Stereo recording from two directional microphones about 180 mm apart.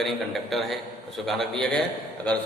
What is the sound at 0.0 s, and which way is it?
A man's voice, centre (ahead or behind).